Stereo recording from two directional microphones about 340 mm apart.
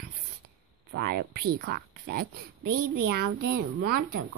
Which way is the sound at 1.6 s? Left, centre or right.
Right.